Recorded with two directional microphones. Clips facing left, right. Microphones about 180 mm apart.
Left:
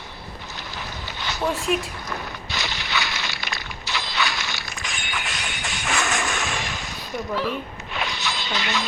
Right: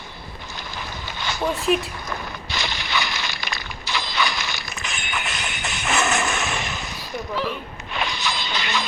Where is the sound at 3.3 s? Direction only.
Centre (ahead or behind).